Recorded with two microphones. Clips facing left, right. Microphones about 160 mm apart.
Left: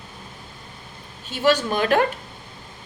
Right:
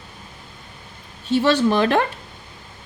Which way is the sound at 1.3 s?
30° right (ahead or behind).